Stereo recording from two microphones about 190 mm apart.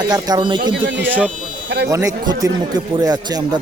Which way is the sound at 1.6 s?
65° right (ahead or behind).